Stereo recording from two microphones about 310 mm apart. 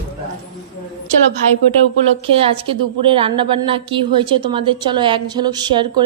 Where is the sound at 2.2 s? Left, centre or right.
Centre.